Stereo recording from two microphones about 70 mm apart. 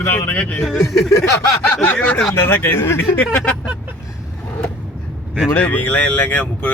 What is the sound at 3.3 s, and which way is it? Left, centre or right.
Speech, centre.